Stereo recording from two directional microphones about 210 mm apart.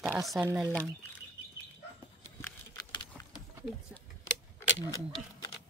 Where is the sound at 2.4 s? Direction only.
15° left (ahead or behind).